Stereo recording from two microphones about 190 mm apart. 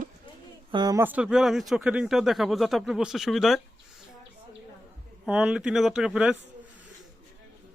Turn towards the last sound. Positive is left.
turn(degrees=-5)  # may be behind; listen again after turning